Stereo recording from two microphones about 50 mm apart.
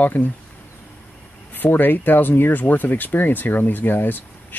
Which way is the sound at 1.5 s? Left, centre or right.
Left.